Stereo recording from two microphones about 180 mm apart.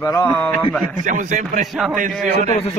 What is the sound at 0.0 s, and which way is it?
Speech, 15° left (ahead or behind).